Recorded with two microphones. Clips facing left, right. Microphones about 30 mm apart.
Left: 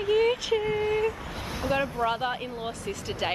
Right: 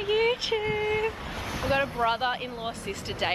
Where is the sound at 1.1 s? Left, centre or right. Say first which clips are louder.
Even; right.